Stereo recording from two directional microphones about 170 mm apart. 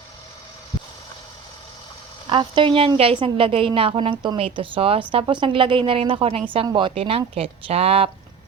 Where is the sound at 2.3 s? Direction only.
30° right (ahead or behind).